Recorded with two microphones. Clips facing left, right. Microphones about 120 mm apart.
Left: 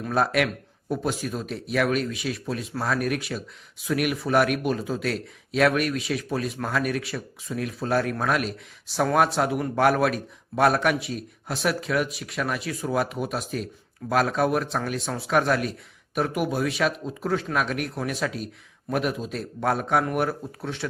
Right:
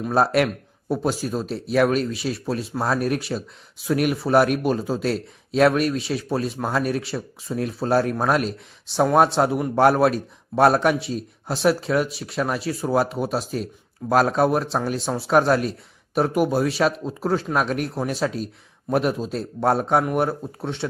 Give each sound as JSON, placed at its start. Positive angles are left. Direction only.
{"t": 0.1, "sound": "a man's voice", "side_deg": -35}